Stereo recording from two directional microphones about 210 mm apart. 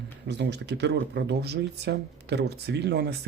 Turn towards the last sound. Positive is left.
turn(degrees=-50)  # may be behind; listen again after turning